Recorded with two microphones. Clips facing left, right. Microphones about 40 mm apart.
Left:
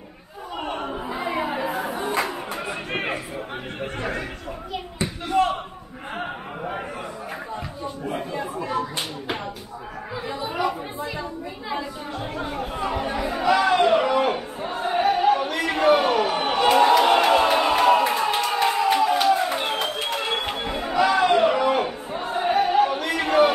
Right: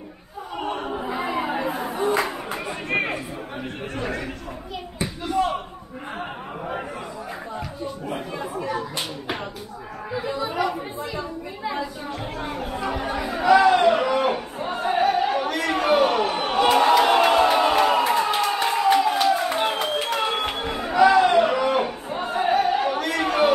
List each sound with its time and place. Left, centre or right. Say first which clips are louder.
0.6 s chatter: right 1 dB; centre
1.0 s chatter: right 3 dB; right
1.4 s chatter: even; right
5.4 s slam: left 2 dB; left
10.1 s chatter: right 3 dB; centre
12.9 s chatter: left 1 dB; centre
13.7 s a sound: right 1 dB; centre
20.2 s chatter: right 1 dB; centre
21.2 s a sound: even; centre
22.1 s music: right 2 dB; centre
22.7 s a sound: left 2 dB; centre